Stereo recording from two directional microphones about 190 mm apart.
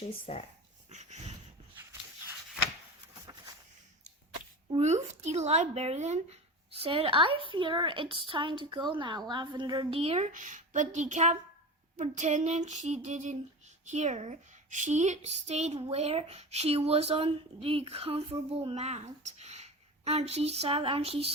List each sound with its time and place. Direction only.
0.3 s speech: 30° left (ahead or behind)
0.9 s dog: 35° right (ahead or behind)
4.7 s a woman's voice: 35° right (ahead or behind)